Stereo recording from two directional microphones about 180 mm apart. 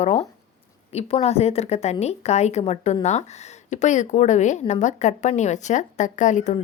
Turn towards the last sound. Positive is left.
turn(degrees=45)  # may be behind; listen again after turning